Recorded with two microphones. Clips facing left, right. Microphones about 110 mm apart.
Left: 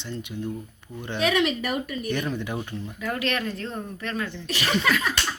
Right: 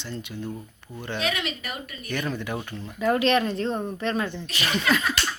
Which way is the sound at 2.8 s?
25° right (ahead or behind).